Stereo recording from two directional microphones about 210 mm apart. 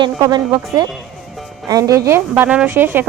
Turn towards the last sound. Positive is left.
turn(degrees=-10)  # may be behind; listen again after turning